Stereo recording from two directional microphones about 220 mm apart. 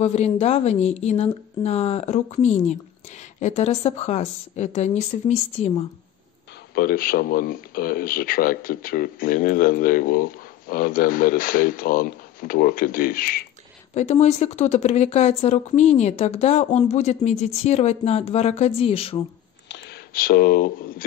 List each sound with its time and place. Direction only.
0.0 s speech: 30° left (ahead or behind)
6.7 s speech: 45° left (ahead or behind)
13.9 s speech: 30° left (ahead or behind)
19.7 s speech: 50° left (ahead or behind)